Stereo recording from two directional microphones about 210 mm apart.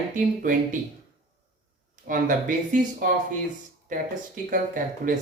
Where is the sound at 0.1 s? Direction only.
40° right (ahead or behind).